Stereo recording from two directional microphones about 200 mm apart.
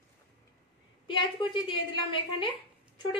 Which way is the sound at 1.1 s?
25° left (ahead or behind).